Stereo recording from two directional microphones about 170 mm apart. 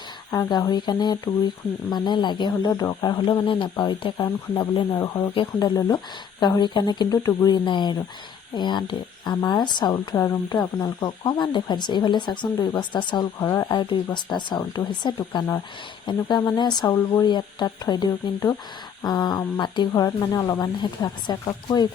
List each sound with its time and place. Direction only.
0.3 s speech: 20° left (ahead or behind)